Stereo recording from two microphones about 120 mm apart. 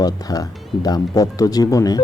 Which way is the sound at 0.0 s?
30° left (ahead or behind).